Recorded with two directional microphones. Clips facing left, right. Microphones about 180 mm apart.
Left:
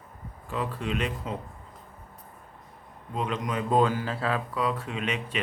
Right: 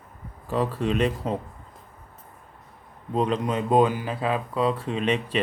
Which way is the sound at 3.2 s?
35° right (ahead or behind).